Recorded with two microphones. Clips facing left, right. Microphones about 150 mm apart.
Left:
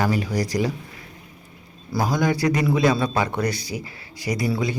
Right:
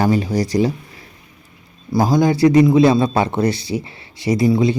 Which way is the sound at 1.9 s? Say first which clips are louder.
Right 7 dB; 30° right (ahead or behind).